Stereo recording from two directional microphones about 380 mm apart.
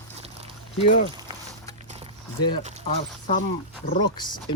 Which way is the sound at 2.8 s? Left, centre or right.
Centre.